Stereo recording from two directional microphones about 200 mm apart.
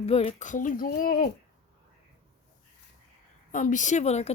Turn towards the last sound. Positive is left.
turn(degrees=35)  # may be behind; listen again after turning